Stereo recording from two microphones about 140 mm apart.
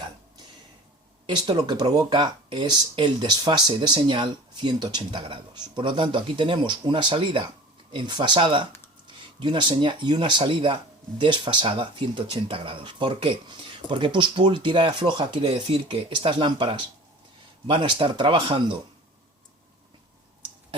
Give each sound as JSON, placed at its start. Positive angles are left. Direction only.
{"t": 1.3, "sound": "speech", "side_deg": -30}